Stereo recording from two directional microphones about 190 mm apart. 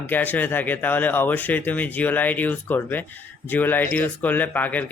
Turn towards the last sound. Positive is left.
turn(degrees=10)  # may be behind; listen again after turning